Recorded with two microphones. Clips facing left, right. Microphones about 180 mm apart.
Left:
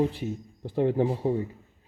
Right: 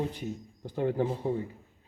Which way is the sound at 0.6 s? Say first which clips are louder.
Left 4 dB; 30° left (ahead or behind).